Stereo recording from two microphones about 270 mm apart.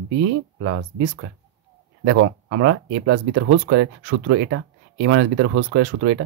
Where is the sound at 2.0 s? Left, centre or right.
Right.